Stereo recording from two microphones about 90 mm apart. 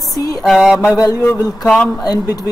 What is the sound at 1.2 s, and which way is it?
Speech, 10° left (ahead or behind).